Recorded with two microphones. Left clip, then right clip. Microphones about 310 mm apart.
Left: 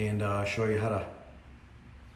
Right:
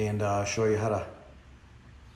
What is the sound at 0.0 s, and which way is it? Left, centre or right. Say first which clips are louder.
A man's voice: right 3 dB; centre.